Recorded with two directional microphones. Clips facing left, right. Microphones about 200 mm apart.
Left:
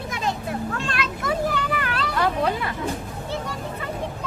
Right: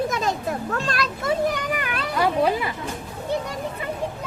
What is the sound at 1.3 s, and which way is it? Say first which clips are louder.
A child's voice: right 2 dB; 15° right (ahead or behind).